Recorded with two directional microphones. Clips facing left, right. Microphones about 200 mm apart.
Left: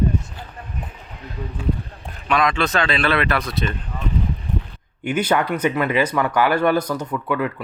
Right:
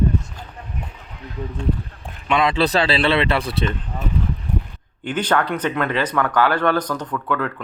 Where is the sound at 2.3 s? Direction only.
30° right (ahead or behind).